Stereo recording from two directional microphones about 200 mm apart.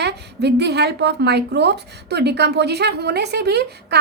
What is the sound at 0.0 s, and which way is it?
A woman's voice, 55° right (ahead or behind).